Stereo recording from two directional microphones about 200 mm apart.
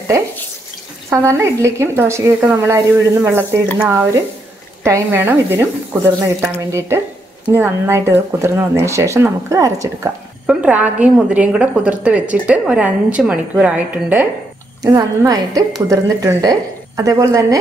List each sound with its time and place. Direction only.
1.1 s a woman's voice: 15° right (ahead or behind)